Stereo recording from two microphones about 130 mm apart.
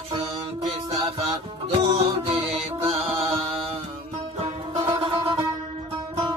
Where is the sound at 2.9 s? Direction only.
50° right (ahead or behind).